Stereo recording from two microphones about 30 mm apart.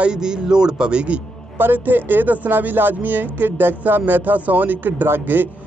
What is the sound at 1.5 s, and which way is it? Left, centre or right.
Speech, right.